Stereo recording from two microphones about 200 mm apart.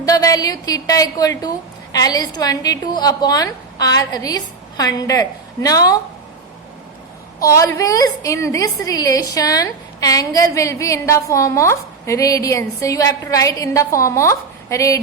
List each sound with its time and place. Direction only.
0.0 s a woman's voice: 20° left (ahead or behind)
7.3 s a woman's voice: 15° left (ahead or behind)